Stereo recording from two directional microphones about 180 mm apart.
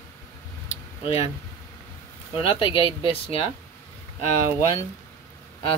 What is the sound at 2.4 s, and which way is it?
Speech, 30° left (ahead or behind).